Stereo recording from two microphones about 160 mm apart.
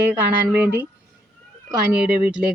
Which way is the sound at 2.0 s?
5° right (ahead or behind).